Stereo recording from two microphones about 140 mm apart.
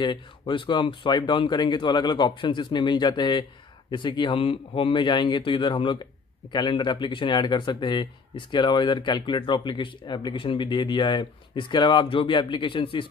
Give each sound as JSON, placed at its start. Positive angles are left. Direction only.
{"t": 0.0, "sound": "speech", "side_deg": 35}